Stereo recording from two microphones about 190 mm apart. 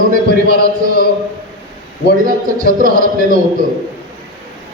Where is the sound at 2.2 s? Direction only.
45° right (ahead or behind).